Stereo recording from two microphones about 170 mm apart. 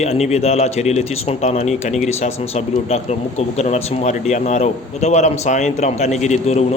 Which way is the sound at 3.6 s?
40° left (ahead or behind).